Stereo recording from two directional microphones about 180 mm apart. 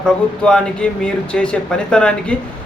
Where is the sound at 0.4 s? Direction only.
5° left (ahead or behind).